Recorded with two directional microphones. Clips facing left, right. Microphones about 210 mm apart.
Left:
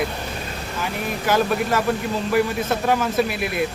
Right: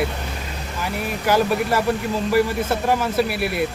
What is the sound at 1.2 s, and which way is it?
Speech, 10° right (ahead or behind).